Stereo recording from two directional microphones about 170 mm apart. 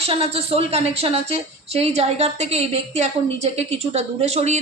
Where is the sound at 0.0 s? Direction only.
35° right (ahead or behind).